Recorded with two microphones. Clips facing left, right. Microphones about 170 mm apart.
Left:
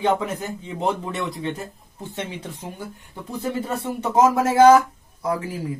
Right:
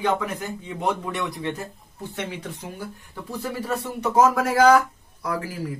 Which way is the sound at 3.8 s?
25° left (ahead or behind).